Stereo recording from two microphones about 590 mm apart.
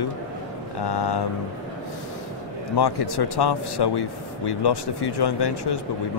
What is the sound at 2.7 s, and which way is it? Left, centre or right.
A man's voice, left.